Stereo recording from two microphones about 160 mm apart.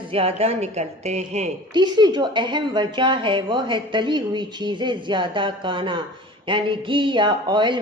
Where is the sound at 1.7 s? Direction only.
25° right (ahead or behind).